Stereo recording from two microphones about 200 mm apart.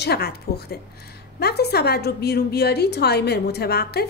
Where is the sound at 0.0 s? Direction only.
50° left (ahead or behind).